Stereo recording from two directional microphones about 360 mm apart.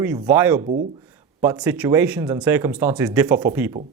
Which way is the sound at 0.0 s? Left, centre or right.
Centre.